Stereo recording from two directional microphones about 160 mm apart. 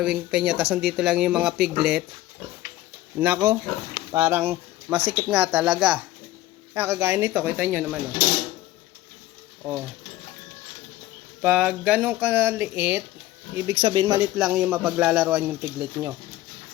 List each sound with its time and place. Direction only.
0.0 s speech: 5° right (ahead or behind)
3.2 s speech: 15° right (ahead or behind)
4.9 s speech: 35° right (ahead or behind)
5.3 s speech: 5° right (ahead or behind)
6.7 s speech: 15° right (ahead or behind)
9.6 s speech: 5° right (ahead or behind)
11.4 s speech: 5° right (ahead or behind)
13.7 s speech: 30° right (ahead or behind)
14.3 s speech: 5° right (ahead or behind)